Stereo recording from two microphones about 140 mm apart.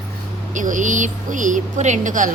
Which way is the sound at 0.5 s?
65° right (ahead or behind).